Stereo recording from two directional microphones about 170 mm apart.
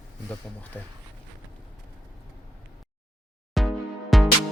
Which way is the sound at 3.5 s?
Centre (ahead or behind).